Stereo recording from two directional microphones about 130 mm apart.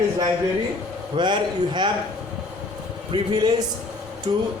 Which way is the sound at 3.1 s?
35° right (ahead or behind).